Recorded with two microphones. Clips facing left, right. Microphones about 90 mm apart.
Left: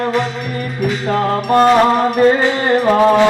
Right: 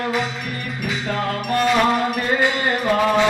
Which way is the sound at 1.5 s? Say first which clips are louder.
Left 7 dB; 35° left (ahead or behind).